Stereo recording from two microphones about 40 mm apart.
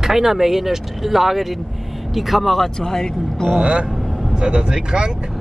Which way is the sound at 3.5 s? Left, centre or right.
Right.